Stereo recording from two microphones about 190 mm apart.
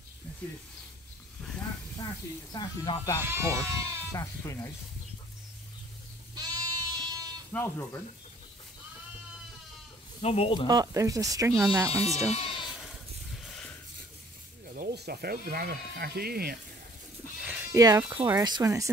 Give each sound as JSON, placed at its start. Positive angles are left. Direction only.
{"t": 2.5, "sound": "speech", "side_deg": 20}
{"t": 3.3, "sound": "speech", "side_deg": -15}
{"t": 4.1, "sound": "speech", "side_deg": 15}
{"t": 6.3, "sound": "sheep", "side_deg": -20}
{"t": 7.5, "sound": "speech", "side_deg": 15}
{"t": 10.2, "sound": "speech", "side_deg": 30}
{"t": 10.7, "sound": "speech", "side_deg": -20}
{"t": 12.4, "sound": "sheep", "side_deg": 30}
{"t": 14.7, "sound": "speech", "side_deg": -55}
{"t": 17.5, "sound": "speech", "side_deg": -15}